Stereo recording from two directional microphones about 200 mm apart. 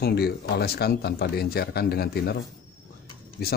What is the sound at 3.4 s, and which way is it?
Speech, 50° left (ahead or behind).